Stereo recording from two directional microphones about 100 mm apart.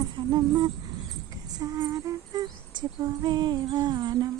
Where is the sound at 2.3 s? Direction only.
45° right (ahead or behind).